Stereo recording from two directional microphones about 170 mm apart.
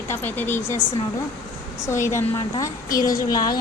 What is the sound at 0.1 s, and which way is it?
Speech, 10° left (ahead or behind).